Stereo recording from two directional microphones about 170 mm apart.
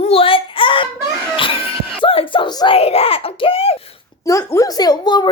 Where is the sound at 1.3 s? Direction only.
30° left (ahead or behind).